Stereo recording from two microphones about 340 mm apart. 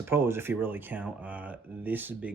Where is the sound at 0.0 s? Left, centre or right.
Centre.